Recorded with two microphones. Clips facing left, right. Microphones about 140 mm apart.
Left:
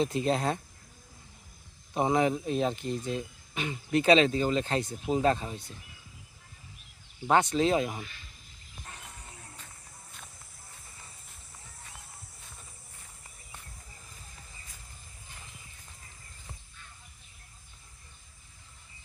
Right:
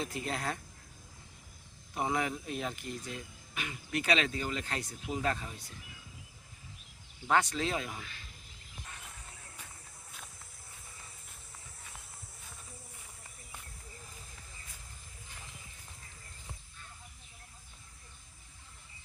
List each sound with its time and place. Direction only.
0.0 s speech: 25° left (ahead or behind)
1.9 s speech: 25° left (ahead or behind)
7.3 s speech: 25° left (ahead or behind)